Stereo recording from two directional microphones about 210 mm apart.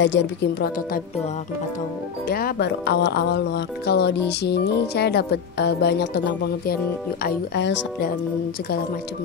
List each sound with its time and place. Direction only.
0.0 s speech: 55° left (ahead or behind)
2.2 s speech: 45° left (ahead or behind)